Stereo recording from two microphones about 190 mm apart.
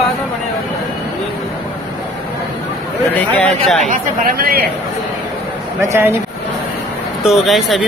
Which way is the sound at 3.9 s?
50° right (ahead or behind).